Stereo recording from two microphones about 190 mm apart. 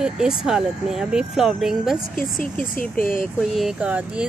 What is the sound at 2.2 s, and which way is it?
Speech, 45° left (ahead or behind).